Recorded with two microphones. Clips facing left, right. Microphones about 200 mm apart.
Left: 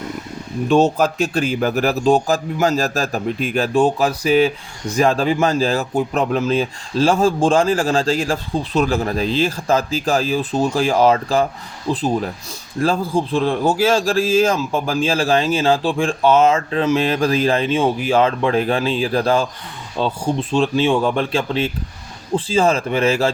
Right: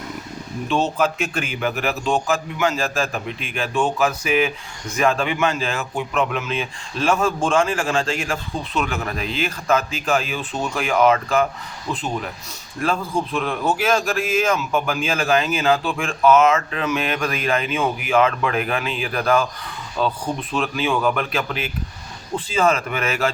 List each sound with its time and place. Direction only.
0.7 s a man's voice: 40° left (ahead or behind)